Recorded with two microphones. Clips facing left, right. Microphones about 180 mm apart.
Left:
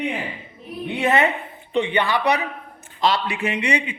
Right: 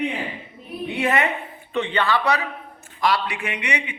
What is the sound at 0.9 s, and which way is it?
A man's voice, 25° left (ahead or behind).